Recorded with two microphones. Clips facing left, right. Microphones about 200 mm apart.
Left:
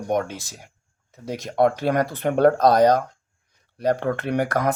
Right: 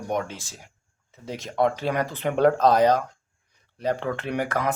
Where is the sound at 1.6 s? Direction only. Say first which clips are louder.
Left 4 dB; 55° left (ahead or behind).